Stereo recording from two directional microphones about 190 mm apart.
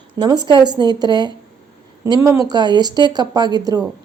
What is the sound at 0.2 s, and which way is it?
Speech, 20° right (ahead or behind).